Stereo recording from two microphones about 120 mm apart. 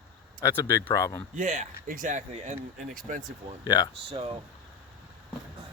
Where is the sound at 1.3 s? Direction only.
85° right.